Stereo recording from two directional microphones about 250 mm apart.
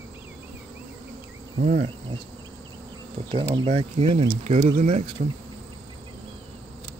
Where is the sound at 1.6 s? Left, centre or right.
Right.